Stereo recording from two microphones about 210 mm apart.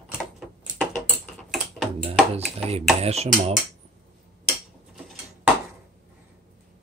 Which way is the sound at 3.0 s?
30° right (ahead or behind).